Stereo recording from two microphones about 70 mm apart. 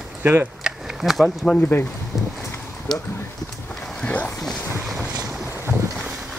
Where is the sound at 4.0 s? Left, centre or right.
Centre.